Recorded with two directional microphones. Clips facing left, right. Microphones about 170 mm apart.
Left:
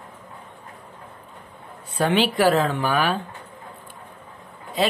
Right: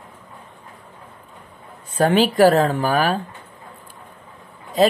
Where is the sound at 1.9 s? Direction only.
45° right (ahead or behind).